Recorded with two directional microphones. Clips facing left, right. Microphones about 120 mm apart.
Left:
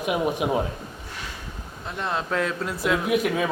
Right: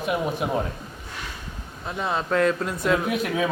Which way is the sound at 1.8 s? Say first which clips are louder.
Right 2 dB; centre (ahead or behind).